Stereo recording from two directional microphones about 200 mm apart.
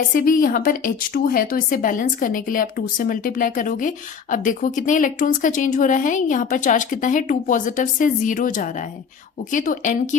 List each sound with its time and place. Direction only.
0.1 s a woman's voice: 45° left (ahead or behind)